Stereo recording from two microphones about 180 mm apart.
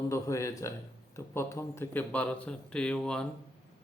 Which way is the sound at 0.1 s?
15° left (ahead or behind).